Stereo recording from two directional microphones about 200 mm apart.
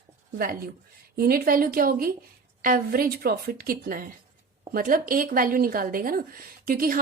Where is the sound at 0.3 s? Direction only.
50° right (ahead or behind).